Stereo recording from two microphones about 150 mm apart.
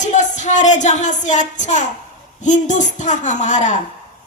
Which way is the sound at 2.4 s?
55° left (ahead or behind).